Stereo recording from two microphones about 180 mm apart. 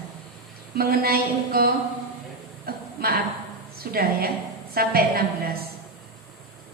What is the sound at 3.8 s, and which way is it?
A woman's voice, 55° right (ahead or behind).